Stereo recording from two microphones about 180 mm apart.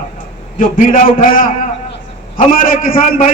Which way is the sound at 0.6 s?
50° left (ahead or behind).